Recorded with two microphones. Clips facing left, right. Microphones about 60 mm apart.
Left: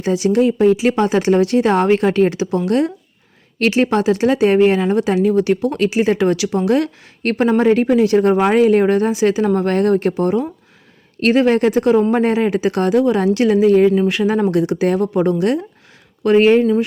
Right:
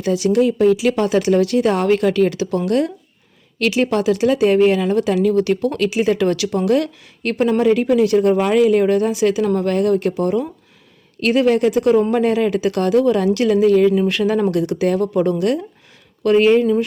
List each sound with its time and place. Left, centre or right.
0.0 s speech: left
7.2 s speech: left